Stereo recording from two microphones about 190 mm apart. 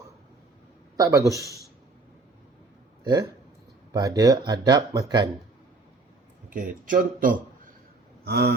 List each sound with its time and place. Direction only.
0.9 s a man's voice: 15° right (ahead or behind)
3.0 s speech: 20° right (ahead or behind)
6.5 s a man's voice: 45° right (ahead or behind)
8.3 s speech: 60° right (ahead or behind)